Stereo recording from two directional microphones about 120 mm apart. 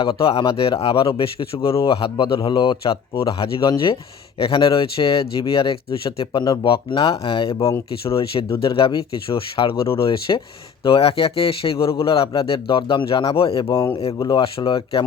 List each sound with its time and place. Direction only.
0.0 s speech: 50° left (ahead or behind)
14.2 s speech: 40° left (ahead or behind)